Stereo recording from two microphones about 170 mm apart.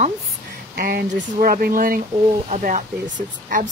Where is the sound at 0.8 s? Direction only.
60° right (ahead or behind).